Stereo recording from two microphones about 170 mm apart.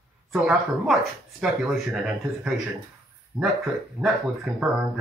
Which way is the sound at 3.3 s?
25° right (ahead or behind).